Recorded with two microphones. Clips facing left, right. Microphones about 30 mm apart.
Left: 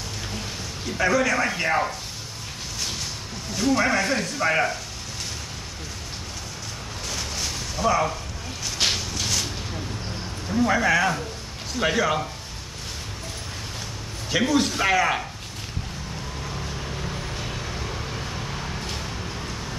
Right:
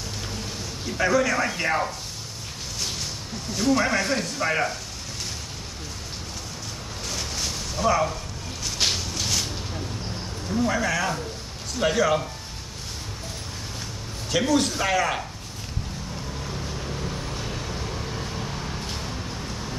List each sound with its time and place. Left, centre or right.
0.8 s speech: centre
3.5 s speech: centre
7.1 s a sound: centre
10.5 s speech: centre
14.3 s speech: centre
16.9 s vehicle: centre